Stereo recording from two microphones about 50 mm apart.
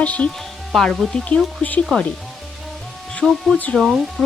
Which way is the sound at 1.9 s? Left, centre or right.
Left.